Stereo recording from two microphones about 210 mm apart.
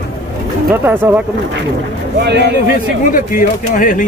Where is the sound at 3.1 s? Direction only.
40° left (ahead or behind).